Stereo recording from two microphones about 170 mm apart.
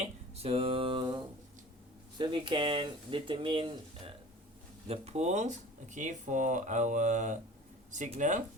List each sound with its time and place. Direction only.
0.0 s speech: 35° right (ahead or behind)